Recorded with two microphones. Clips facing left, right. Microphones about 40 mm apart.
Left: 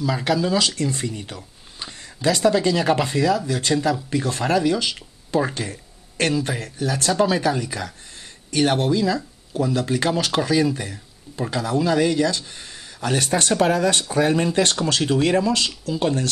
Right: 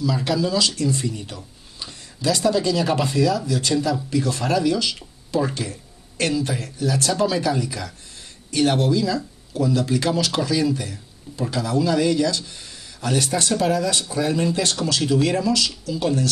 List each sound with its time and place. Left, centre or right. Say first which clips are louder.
0.0 s speech: left 1 dB; left